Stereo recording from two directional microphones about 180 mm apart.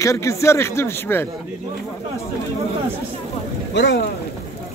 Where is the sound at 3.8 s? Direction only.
75° left (ahead or behind).